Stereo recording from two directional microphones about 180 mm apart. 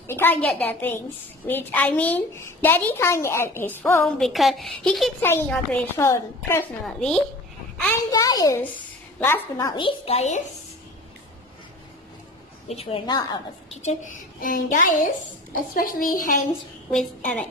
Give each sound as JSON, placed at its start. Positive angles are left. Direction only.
{"t": 0.0, "sound": "a woman's voice", "side_deg": 10}
{"t": 4.0, "sound": "a woman's voice", "side_deg": 0}
{"t": 5.2, "sound": "a woman's voice", "side_deg": 10}
{"t": 7.0, "sound": "a woman's voice", "side_deg": 5}
{"t": 7.7, "sound": "a sound", "side_deg": 5}
{"t": 8.1, "sound": "a woman's voice", "side_deg": 20}
{"t": 12.6, "sound": "a woman's voice", "side_deg": 30}
{"t": 13.7, "sound": "a woman's voice", "side_deg": 45}
{"t": 16.9, "sound": "a woman's voice", "side_deg": 5}